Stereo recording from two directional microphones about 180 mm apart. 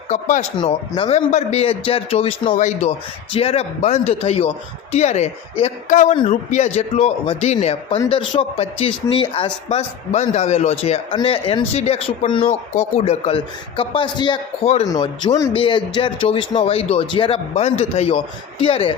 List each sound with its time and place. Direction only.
0.1 s a man's voice: 45° left (ahead or behind)
2.6 s a man's voice: 45° left (ahead or behind)